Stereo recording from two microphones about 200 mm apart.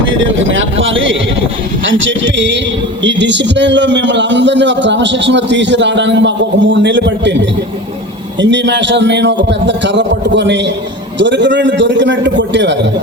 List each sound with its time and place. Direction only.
0.0 s a man's voice: 75° right (ahead or behind)
8.4 s a man's voice: 65° right (ahead or behind)